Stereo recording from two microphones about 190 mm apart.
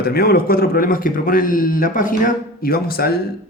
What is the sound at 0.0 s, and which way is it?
Speech, 55° left (ahead or behind).